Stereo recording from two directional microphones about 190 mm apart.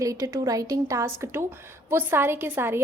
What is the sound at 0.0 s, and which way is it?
A woman's voice, 15° right (ahead or behind).